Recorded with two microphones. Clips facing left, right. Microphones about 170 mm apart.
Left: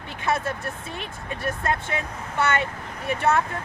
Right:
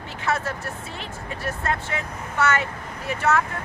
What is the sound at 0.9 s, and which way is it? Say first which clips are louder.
Speech: even; 20° left (ahead or behind).